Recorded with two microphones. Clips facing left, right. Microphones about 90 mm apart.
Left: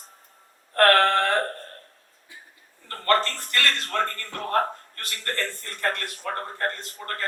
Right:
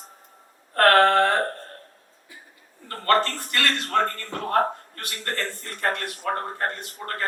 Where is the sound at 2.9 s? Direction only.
20° right (ahead or behind).